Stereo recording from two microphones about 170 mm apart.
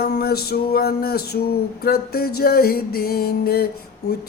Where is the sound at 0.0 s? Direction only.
65° left (ahead or behind).